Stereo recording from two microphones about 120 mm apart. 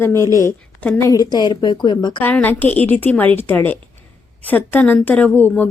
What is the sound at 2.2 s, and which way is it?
A woman's voice, 15° left (ahead or behind).